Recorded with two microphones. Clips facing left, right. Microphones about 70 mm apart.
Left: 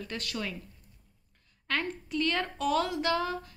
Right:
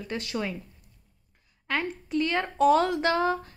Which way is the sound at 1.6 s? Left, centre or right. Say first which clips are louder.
Right 3 dB; centre.